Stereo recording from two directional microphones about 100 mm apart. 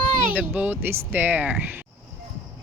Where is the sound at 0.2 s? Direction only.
15° right (ahead or behind).